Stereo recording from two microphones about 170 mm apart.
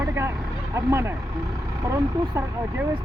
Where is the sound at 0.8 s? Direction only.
15° right (ahead or behind).